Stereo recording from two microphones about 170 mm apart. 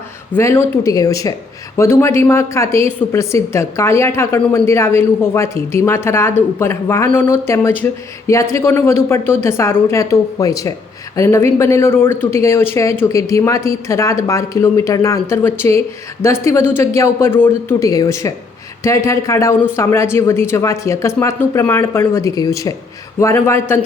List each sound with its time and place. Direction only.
0.3 s a woman's voice: 15° left (ahead or behind)